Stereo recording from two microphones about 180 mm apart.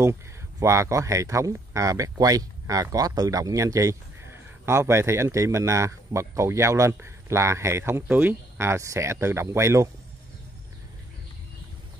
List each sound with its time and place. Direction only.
0.0 s speech: 15° right (ahead or behind)